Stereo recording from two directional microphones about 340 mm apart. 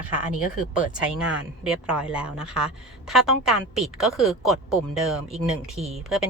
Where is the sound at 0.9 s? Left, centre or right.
Centre.